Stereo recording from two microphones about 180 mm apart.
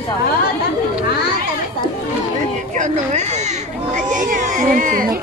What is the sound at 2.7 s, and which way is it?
Speech, 40° right (ahead or behind).